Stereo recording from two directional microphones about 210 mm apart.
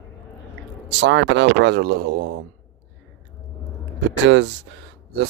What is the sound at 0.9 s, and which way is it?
Speech, 60° right (ahead or behind).